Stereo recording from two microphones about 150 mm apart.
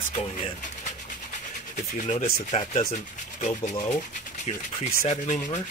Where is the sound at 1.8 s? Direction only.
55° left (ahead or behind).